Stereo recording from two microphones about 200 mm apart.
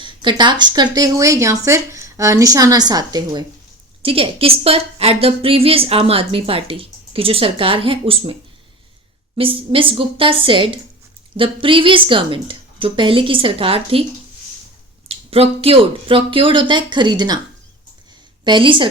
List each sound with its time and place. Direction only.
0.0 s a woman's voice: 25° right (ahead or behind)
15.0 s a woman's voice: 30° right (ahead or behind)
18.4 s a woman's voice: 25° right (ahead or behind)